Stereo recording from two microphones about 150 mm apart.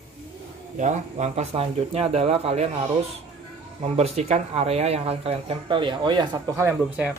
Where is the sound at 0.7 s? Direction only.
55° right (ahead or behind); by 6.6 s 30° right (ahead or behind).